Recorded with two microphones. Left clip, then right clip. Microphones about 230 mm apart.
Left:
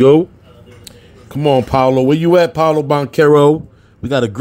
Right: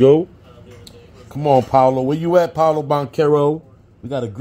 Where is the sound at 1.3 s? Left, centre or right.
Left.